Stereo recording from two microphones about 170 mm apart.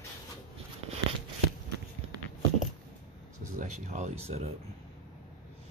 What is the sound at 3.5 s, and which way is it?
Speech, 45° right (ahead or behind).